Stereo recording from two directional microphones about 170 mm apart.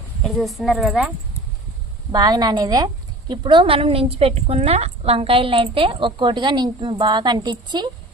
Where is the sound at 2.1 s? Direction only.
25° right (ahead or behind).